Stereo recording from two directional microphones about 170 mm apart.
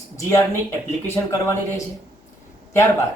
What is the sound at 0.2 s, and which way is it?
Speech, 15° left (ahead or behind).